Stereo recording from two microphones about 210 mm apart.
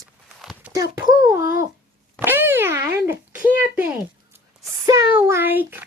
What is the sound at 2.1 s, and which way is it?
Boing, 10° right (ahead or behind).